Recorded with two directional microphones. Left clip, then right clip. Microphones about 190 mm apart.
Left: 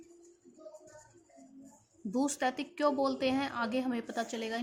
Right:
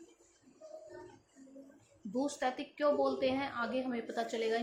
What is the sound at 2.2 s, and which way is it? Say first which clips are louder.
Speech: left 3 dB; 45° left (ahead or behind).